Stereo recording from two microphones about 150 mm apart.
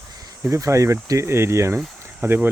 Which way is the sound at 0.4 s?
20° right (ahead or behind).